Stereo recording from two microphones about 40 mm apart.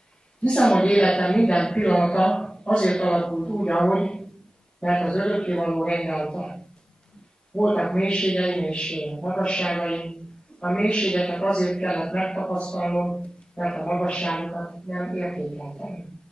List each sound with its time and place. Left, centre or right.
0.4 s a man's voice: left